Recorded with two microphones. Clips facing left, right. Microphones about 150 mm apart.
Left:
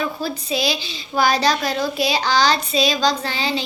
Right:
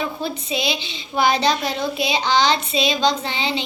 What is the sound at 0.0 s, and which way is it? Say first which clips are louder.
A woman's voice: left 1 dB; 20° right (ahead or behind).